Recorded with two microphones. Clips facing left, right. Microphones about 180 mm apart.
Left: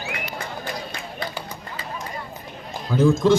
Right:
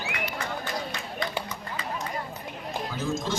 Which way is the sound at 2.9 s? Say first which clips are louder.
Left 15 dB; 60° left (ahead or behind).